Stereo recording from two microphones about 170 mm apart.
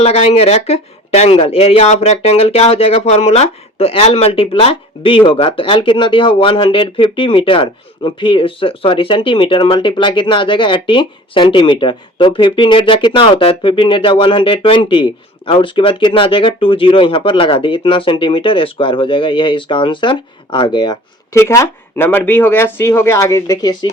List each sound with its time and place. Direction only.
0.0 s speech: 40° left (ahead or behind); by 23.9 s 25° left (ahead or behind)